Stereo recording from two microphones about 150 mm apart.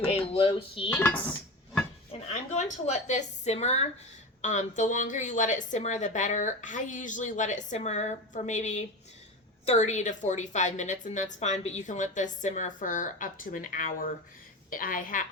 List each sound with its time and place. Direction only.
0.0 s speech: 40° left (ahead or behind)
0.9 s speech: 10° left (ahead or behind)
2.2 s a woman's voice: 50° left (ahead or behind); by 15.2 s 70° left (ahead or behind)